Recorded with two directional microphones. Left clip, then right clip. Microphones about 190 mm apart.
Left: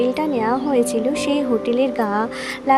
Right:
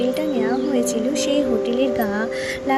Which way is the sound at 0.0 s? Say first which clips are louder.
Left 1 dB; 25° left (ahead or behind).